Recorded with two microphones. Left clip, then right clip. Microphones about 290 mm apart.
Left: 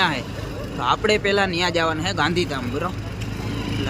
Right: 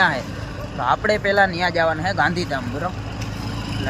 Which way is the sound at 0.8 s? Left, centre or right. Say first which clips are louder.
Right 1 dB; centre.